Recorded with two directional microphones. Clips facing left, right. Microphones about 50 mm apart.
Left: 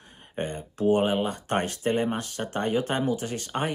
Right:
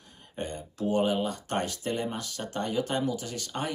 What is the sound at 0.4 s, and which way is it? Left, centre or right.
Speech, left.